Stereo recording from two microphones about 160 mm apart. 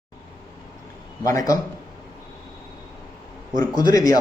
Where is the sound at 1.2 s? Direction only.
20° left (ahead or behind).